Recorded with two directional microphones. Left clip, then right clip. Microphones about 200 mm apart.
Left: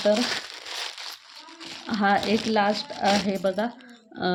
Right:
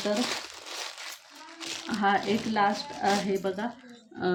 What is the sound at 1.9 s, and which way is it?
Speech, 50° left (ahead or behind).